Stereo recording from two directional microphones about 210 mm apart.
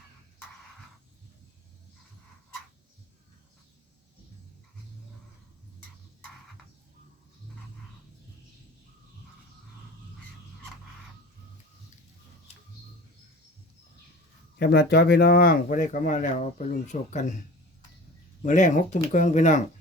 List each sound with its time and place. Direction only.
14.6 s speech: 50° left (ahead or behind)
18.4 s speech: 35° left (ahead or behind)